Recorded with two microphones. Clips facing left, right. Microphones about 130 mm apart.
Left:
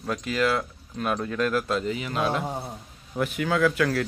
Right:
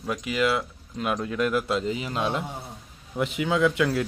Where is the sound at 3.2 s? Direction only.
20° right (ahead or behind).